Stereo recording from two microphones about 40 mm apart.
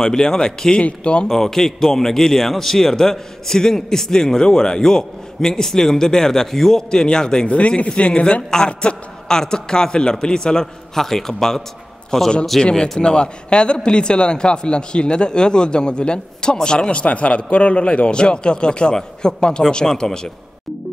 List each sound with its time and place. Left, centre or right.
0.0 s a man's voice: centre
0.8 s a man's voice: left
1.2 s a man's voice: centre
7.5 s a man's voice: left; by 12.7 s centre
13.0 s a man's voice: left